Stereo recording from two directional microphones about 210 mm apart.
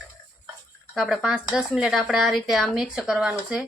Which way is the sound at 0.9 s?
Centre (ahead or behind).